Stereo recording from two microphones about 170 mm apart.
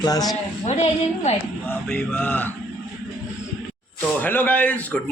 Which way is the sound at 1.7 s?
5° left (ahead or behind).